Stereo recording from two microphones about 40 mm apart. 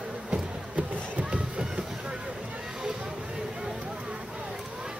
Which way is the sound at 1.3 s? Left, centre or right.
Right.